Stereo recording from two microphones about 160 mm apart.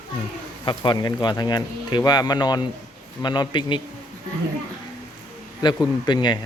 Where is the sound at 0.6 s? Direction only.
30° left (ahead or behind).